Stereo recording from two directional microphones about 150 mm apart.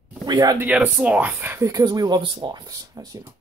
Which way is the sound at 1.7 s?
25° right (ahead or behind).